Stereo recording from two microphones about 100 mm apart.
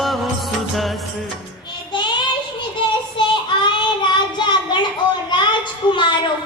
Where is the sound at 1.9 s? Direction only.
50° left (ahead or behind).